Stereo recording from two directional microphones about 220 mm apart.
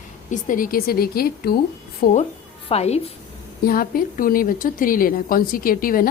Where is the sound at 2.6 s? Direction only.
30° left (ahead or behind).